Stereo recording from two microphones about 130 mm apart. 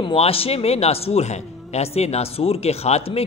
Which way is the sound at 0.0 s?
50° left (ahead or behind).